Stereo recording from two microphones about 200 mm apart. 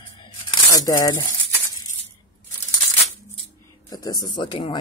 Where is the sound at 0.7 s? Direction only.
15° left (ahead or behind).